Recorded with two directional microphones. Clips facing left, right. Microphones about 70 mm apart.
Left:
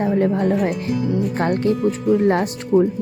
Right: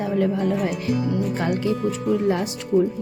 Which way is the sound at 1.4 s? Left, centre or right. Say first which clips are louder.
Left 4 dB; left.